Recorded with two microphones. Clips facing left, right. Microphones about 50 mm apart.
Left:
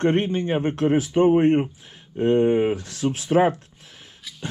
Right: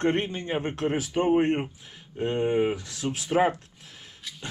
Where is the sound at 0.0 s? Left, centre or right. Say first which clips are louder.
Left 5 dB; left.